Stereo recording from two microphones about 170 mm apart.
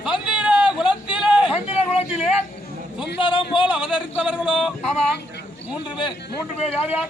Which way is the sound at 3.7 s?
5° right (ahead or behind).